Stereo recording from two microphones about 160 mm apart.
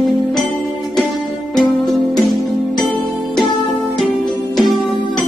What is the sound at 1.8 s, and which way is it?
Music, centre (ahead or behind).